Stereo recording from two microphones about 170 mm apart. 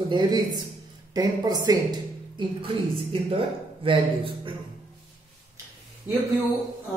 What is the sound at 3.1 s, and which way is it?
Speech, 30° right (ahead or behind).